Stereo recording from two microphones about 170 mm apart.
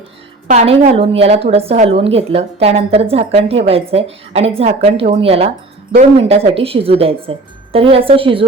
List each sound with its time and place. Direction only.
0.4 s a woman's voice: 40° right (ahead or behind)